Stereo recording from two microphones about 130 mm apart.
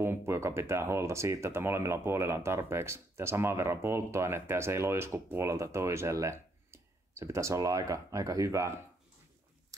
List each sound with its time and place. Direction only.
0.0 s speech: 20° right (ahead or behind)